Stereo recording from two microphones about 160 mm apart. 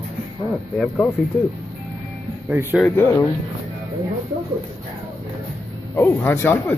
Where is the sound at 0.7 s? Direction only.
5° left (ahead or behind).